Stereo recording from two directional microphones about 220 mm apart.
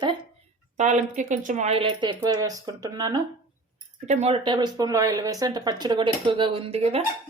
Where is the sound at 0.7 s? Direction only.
35° right (ahead or behind); by 3.2 s 15° right (ahead or behind).